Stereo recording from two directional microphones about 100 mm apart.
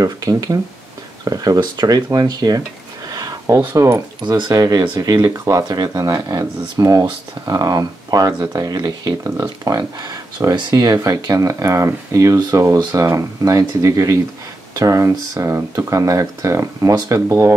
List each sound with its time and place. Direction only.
0.0 s speech: 35° right (ahead or behind)
3.1 s a sound: 40° right (ahead or behind)
4.2 s speech: 50° right (ahead or behind)
4.5 s speech: 35° right (ahead or behind)